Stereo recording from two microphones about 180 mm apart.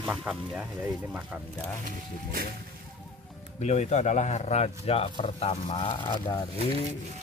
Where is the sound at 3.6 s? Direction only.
40° left (ahead or behind); by 6.4 s 25° left (ahead or behind).